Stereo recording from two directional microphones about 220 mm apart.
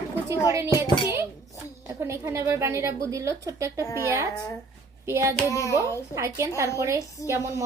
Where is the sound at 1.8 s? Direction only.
10° right (ahead or behind).